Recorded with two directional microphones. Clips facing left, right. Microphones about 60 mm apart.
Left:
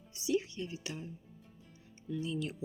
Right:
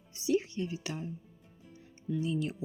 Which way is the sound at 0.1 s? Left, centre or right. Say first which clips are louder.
Right 3 dB; right.